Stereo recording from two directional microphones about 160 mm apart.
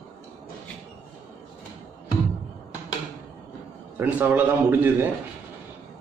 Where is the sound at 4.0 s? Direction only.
10° right (ahead or behind).